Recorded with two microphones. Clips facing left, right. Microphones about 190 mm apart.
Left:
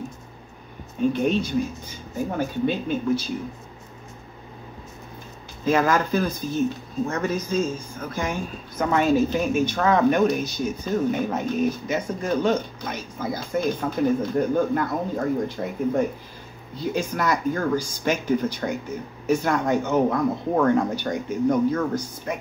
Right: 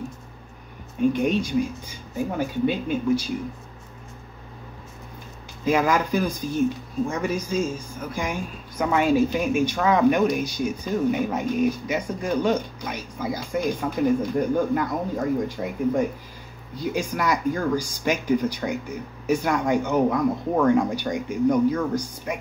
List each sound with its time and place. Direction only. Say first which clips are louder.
1.0 s speech: even; 10° right (ahead or behind)
5.7 s speech: left 1 dB; 10° right (ahead or behind)